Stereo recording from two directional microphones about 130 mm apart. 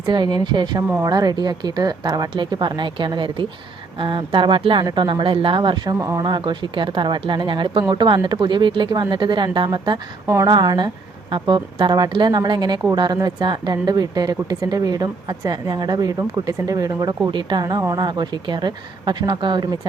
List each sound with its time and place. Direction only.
0.0 s a woman's voice: 35° right (ahead or behind)